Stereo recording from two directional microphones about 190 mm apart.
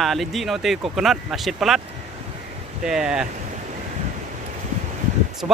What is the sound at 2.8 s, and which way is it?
Speech, 5° right (ahead or behind).